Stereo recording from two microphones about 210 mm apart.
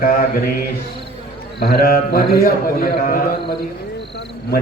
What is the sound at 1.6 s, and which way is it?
A man's voice, 45° left (ahead or behind).